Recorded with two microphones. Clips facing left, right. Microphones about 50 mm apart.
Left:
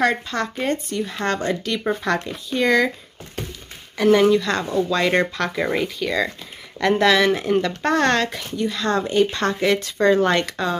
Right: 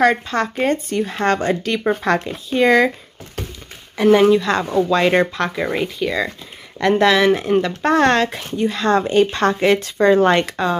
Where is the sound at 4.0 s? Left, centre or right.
Centre.